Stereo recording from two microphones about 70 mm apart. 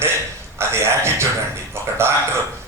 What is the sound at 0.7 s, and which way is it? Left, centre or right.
Speech, right.